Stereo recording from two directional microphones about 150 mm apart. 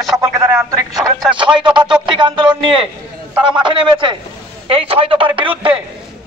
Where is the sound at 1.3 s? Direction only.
35° right (ahead or behind).